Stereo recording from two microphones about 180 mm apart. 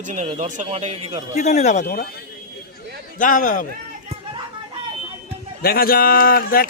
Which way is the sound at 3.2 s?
45° left (ahead or behind).